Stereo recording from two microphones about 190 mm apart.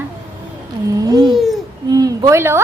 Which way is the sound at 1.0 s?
20° right (ahead or behind).